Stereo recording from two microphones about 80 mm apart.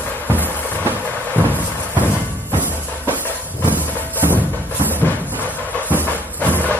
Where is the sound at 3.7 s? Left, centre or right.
Right.